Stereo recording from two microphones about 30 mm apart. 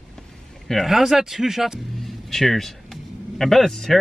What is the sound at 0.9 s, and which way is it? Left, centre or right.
Speech, centre.